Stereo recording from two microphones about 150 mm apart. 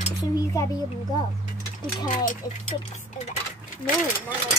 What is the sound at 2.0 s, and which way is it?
Speech, 55° left (ahead or behind).